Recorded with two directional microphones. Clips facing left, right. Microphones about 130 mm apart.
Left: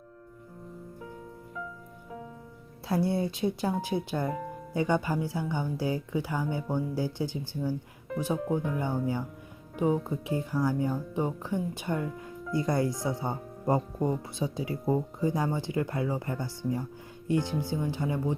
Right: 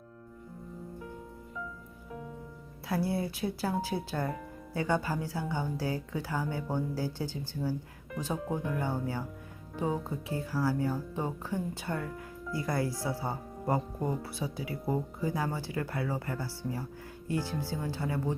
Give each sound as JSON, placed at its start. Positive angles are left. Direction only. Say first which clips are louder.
{"t": 2.8, "sound": "speech", "louder": "left 4 dB", "side_deg": 25}